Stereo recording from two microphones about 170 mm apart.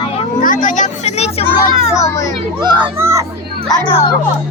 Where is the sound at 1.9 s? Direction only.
20° left (ahead or behind).